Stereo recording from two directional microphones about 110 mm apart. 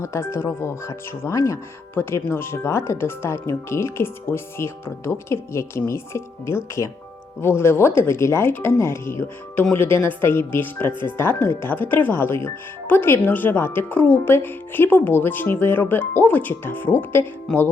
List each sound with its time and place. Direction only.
0.0 s speech: 25° left (ahead or behind)
17.5 s speech: 5° left (ahead or behind)